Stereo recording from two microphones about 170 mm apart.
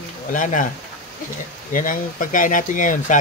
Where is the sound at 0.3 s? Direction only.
50° left (ahead or behind).